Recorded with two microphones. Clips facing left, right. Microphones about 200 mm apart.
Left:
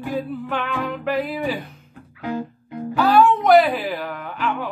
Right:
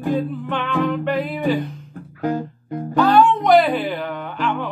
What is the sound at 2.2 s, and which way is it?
Music, 45° right (ahead or behind).